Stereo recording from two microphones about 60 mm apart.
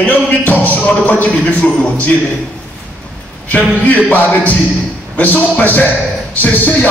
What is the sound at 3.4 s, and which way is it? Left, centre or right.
A man's voice, left.